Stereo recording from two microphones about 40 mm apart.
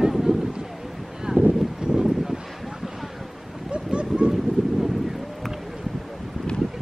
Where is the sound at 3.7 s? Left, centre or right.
Right.